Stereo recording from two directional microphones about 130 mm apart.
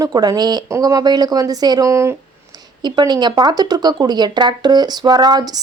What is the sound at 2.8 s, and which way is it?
Speech, 35° right (ahead or behind).